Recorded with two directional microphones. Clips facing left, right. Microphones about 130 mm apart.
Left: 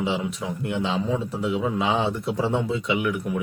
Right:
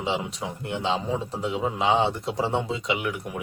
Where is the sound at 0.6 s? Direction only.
30° right (ahead or behind).